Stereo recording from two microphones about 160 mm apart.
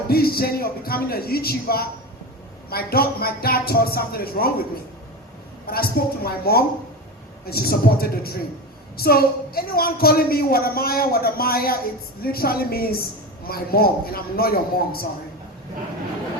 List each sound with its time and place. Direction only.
0.1 s a woman's voice: 70° left (ahead or behind)
5.6 s a woman's voice: 70° left (ahead or behind)